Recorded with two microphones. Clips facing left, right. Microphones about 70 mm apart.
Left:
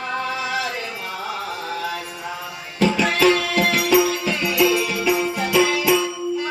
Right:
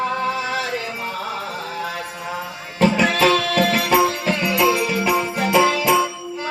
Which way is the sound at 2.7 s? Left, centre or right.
Right.